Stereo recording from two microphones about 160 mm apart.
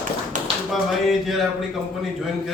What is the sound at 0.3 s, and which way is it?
Tap, 50° right (ahead or behind).